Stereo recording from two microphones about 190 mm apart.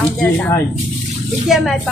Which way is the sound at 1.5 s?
Centre (ahead or behind).